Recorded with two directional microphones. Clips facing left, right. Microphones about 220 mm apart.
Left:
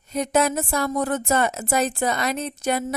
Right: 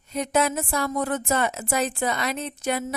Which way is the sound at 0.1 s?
40° left (ahead or behind).